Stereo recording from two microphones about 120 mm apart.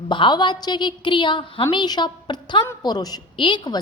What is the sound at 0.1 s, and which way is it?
A woman's voice, 40° left (ahead or behind).